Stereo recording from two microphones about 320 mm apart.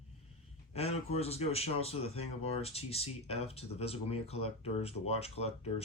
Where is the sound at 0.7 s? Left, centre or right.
Centre.